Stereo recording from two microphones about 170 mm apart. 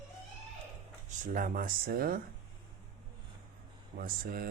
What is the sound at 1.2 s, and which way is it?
Speech, 50° right (ahead or behind).